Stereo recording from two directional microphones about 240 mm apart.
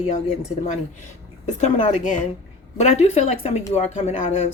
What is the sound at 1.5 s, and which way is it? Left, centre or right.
Speech, left.